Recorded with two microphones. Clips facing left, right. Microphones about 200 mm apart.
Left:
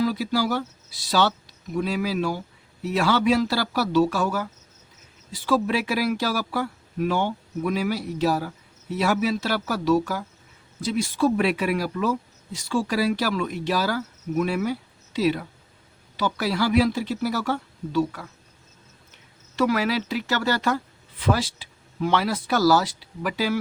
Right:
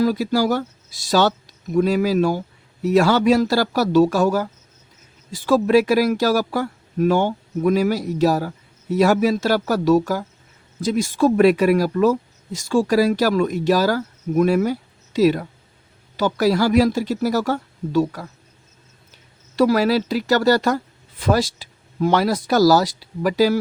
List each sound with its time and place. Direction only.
0.0 s speech: 45° right (ahead or behind)